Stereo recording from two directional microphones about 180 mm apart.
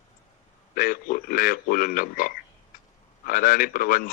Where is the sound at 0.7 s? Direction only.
50° left (ahead or behind).